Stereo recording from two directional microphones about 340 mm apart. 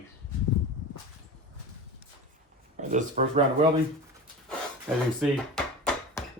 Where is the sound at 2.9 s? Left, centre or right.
Right.